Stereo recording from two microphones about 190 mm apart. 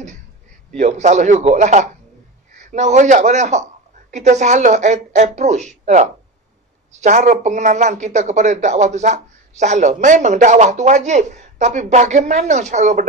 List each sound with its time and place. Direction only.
0.7 s speech: 40° right (ahead or behind)